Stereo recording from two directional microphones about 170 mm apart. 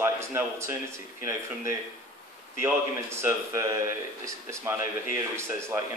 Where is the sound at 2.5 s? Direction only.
15° right (ahead or behind).